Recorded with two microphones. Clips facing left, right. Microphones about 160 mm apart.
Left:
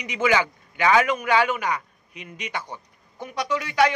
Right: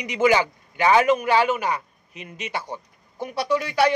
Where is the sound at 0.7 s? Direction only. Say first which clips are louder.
Right 2 dB; 35° right (ahead or behind).